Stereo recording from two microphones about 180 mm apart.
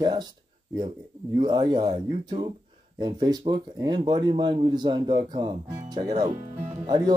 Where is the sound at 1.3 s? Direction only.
25° right (ahead or behind).